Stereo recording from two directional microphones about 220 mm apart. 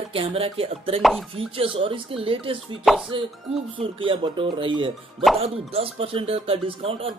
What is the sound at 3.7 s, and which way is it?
Speech, 25° right (ahead or behind).